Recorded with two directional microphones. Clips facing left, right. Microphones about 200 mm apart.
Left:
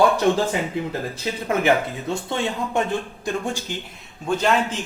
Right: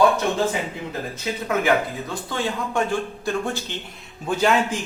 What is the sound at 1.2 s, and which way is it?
Speech, 25° left (ahead or behind).